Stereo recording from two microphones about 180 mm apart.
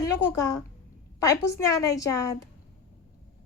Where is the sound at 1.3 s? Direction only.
15° left (ahead or behind).